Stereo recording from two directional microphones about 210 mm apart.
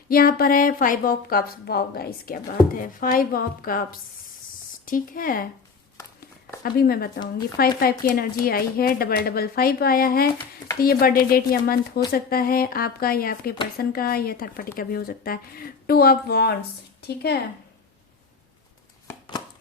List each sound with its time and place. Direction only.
0.1 s speech: 45° left (ahead or behind)
4.9 s speech: 40° left (ahead or behind)
6.6 s a woman's voice: 45° left (ahead or behind)